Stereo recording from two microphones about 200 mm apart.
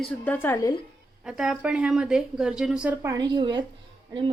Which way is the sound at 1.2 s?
5° right (ahead or behind).